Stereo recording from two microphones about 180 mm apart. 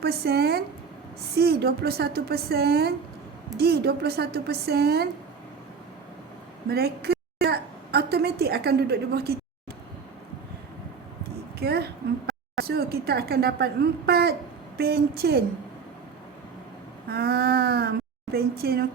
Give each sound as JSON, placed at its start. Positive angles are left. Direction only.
{"t": 0.0, "sound": "speech", "side_deg": -60}
{"t": 6.7, "sound": "a woman's voice", "side_deg": -60}
{"t": 11.6, "sound": "speech", "side_deg": -60}
{"t": 17.1, "sound": "speech", "side_deg": -60}